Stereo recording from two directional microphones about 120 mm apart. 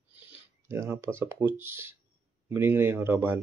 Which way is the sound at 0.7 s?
20° right (ahead or behind).